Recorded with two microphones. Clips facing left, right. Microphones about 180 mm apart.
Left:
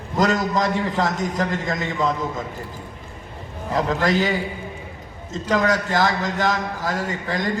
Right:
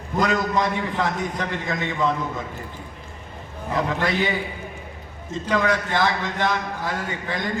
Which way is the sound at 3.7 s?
40° left (ahead or behind).